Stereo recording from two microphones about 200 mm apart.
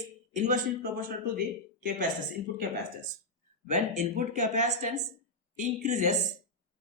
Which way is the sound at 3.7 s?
35° right (ahead or behind).